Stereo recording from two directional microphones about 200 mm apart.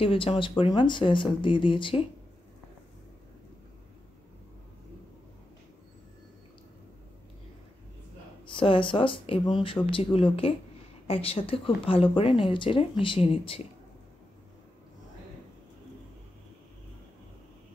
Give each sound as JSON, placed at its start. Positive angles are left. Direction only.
{"t": 0.0, "sound": "speech", "side_deg": 30}
{"t": 8.5, "sound": "speech", "side_deg": 25}